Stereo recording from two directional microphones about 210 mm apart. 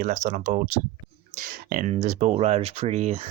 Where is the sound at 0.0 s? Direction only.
35° right (ahead or behind).